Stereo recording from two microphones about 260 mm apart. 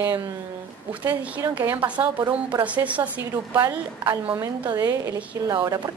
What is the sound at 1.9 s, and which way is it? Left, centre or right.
Speech, centre.